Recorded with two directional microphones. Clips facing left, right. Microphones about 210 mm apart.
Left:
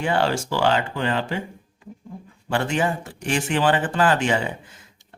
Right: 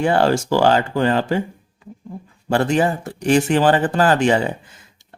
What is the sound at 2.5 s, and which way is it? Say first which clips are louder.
Speech: right 5 dB; 40° right (ahead or behind).